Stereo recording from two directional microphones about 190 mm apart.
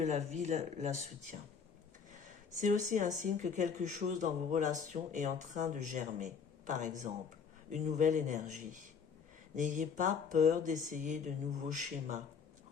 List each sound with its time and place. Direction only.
0.0 s speech: 35° right (ahead or behind)
2.6 s speech: 40° right (ahead or behind)